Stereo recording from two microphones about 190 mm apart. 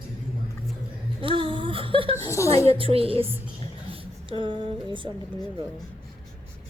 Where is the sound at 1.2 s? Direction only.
25° right (ahead or behind).